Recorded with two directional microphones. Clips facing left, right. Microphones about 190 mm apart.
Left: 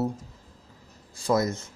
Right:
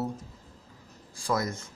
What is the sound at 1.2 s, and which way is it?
Speech, 25° left (ahead or behind).